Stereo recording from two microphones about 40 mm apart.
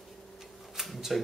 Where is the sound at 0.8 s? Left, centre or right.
Centre.